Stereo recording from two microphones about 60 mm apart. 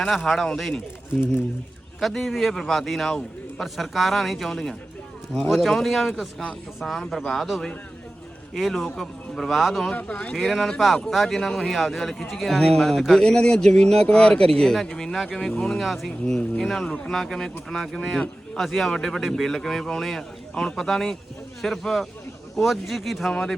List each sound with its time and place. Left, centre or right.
0.2 s a man's voice: centre
2.0 s a man's voice: centre
9.9 s speech: left
10.3 s a man's voice: centre